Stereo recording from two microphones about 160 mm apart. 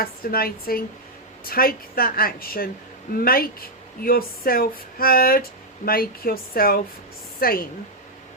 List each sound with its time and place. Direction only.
0.0 s a woman's voice: 70° left (ahead or behind)